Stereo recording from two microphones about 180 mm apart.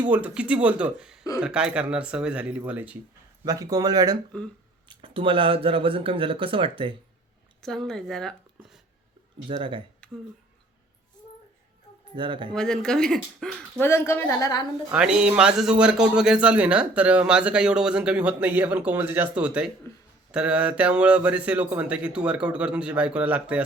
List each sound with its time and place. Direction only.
0.0 s speech: 10° right (ahead or behind)
3.4 s speech: 20° right (ahead or behind)
7.6 s speech: centre (ahead or behind)
9.5 s speech: 30° right (ahead or behind)
10.0 s a sound: 5° left (ahead or behind)
12.1 s speech: 25° right (ahead or behind)
12.5 s speech: 5° left (ahead or behind); by 14.6 s 20° left (ahead or behind)
14.9 s a man's voice: 5° right (ahead or behind)